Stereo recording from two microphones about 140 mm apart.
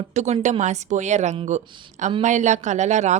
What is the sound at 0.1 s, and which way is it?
A woman's voice, 55° right (ahead or behind).